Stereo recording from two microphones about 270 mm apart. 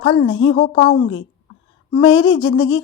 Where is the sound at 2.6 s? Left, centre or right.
Left.